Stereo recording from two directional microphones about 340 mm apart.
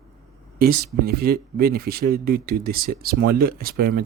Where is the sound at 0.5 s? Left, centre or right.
Right.